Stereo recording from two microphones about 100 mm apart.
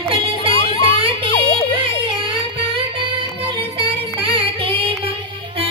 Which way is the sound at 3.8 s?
60° right (ahead or behind).